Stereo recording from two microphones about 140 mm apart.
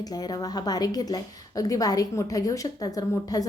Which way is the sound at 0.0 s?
25° left (ahead or behind).